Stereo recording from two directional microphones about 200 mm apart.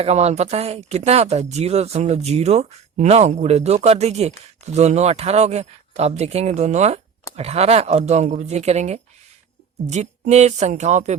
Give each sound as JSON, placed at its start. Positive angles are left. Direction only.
{"t": 0.0, "sound": "speech", "side_deg": -30}